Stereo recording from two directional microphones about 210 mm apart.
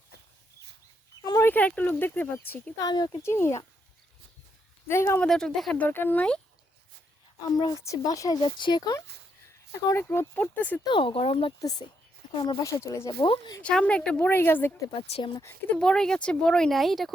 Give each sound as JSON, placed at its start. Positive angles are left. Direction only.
{"t": 1.2, "sound": "speech", "side_deg": 15}
{"t": 4.9, "sound": "speech", "side_deg": 10}
{"t": 7.5, "sound": "speech", "side_deg": 15}
{"t": 10.8, "sound": "speech", "side_deg": 25}
{"t": 13.6, "sound": "speech", "side_deg": 5}
{"t": 15.0, "sound": "speech", "side_deg": 25}
{"t": 15.4, "sound": "speech", "side_deg": 10}